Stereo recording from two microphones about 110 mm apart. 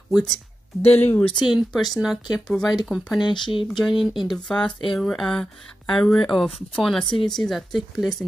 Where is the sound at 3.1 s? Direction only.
45° left (ahead or behind).